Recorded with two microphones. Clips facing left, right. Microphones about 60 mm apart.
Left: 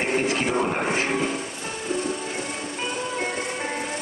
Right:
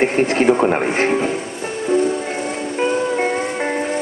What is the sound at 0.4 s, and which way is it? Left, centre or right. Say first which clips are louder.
Speech: right 9 dB; right.